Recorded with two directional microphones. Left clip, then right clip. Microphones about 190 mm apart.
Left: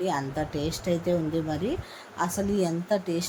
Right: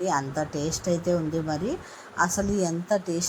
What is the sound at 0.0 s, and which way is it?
A woman's voice, centre (ahead or behind).